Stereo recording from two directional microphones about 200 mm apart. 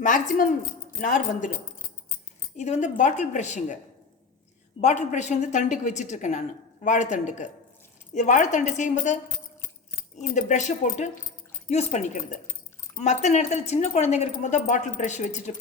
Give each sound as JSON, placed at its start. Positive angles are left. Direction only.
{"t": 0.0, "sound": "speech", "side_deg": 40}
{"t": 2.6, "sound": "speech", "side_deg": 35}
{"t": 4.8, "sound": "speech", "side_deg": 35}
{"t": 10.2, "sound": "speech", "side_deg": 35}